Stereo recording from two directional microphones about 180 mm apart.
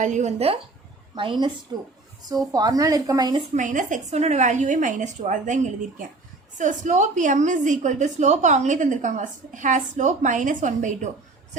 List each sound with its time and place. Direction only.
0.0 s speech: 40° right (ahead or behind)
2.5 s speech: 20° right (ahead or behind)
3.5 s a woman's voice: 45° right (ahead or behind)
6.6 s a woman's voice: 45° right (ahead or behind)